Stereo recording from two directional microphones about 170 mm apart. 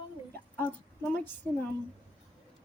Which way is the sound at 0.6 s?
10° left (ahead or behind).